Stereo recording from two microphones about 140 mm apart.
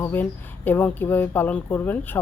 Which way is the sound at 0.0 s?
15° left (ahead or behind).